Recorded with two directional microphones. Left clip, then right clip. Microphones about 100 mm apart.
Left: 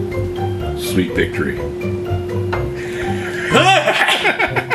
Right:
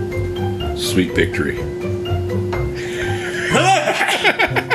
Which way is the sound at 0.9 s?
20° right (ahead or behind).